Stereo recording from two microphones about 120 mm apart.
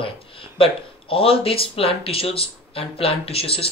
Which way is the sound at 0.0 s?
50° left (ahead or behind).